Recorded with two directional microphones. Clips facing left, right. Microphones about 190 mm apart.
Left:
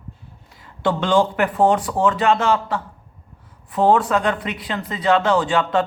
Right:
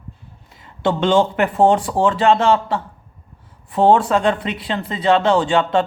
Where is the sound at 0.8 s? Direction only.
25° right (ahead or behind).